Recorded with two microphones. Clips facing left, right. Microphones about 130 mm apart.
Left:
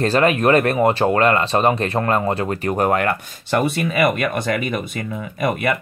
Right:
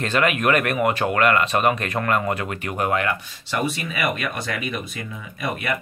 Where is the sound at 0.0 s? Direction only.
35° left (ahead or behind).